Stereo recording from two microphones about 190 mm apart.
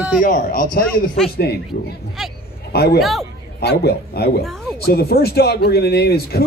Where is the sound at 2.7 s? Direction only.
55° left (ahead or behind).